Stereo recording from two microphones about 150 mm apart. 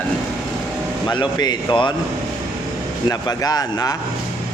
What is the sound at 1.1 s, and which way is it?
Speech, 30° left (ahead or behind).